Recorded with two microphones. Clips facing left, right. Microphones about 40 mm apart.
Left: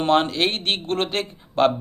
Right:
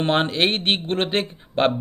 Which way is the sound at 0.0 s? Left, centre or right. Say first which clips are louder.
Left 1 dB; right.